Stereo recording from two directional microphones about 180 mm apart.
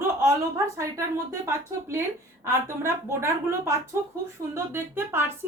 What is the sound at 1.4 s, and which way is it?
A woman's voice, 15° right (ahead or behind).